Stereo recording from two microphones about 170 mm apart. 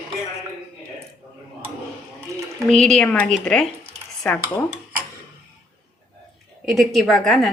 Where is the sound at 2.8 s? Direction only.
5° left (ahead or behind).